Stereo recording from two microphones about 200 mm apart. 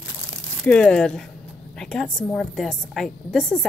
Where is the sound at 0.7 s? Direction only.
5° left (ahead or behind).